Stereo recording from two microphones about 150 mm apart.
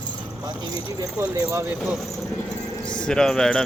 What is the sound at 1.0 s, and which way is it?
Speech, 25° right (ahead or behind).